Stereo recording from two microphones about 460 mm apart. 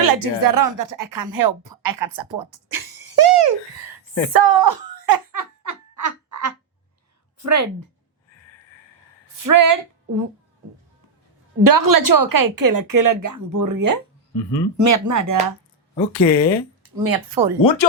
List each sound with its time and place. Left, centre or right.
0.0 s a woman's voice: right
2.3 s a sound: right
4.4 s giggle: right
7.4 s speech: right
9.4 s a woman's voice: right
11.6 s a woman's voice: right
16.0 s speech: centre
17.0 s a woman's voice: right
17.6 s speech: left